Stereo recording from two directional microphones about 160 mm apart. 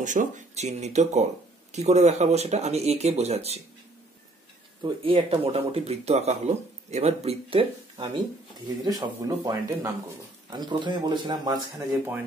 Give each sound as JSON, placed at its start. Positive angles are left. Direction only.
{"t": 0.0, "sound": "speech", "side_deg": -50}
{"t": 4.8, "sound": "speech", "side_deg": -35}
{"t": 8.5, "sound": "speech", "side_deg": -25}